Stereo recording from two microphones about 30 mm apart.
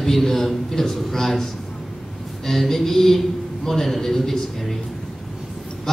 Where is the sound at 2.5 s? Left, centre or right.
Centre.